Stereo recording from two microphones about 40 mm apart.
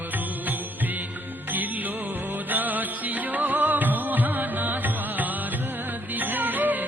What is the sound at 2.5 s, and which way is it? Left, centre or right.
Music, right.